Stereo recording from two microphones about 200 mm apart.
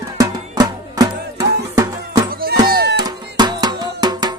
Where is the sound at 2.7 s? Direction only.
50° right (ahead or behind).